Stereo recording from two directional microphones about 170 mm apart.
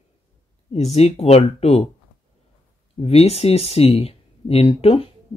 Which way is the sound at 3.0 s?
35° left (ahead or behind).